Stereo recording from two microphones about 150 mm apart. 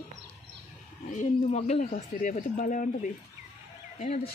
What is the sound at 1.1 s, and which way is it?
Speech, 55° left (ahead or behind).